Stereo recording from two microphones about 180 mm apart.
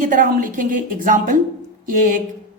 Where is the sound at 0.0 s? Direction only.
50° right (ahead or behind).